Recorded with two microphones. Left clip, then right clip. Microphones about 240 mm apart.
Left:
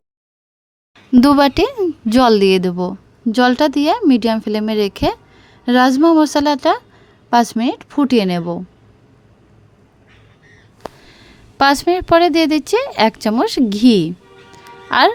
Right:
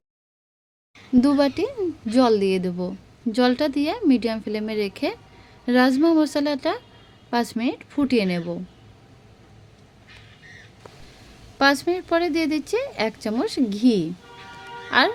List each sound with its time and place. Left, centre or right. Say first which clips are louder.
1.1 s speech: left 8 dB; left
11.5 s speech: left 7 dB; left